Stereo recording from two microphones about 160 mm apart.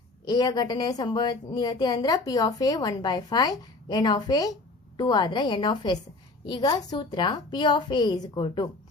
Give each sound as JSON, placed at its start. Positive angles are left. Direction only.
{"t": 0.3, "sound": "a woman's voice", "side_deg": 25}